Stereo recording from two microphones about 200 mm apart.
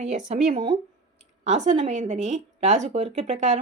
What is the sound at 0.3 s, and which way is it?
Speech, 35° right (ahead or behind).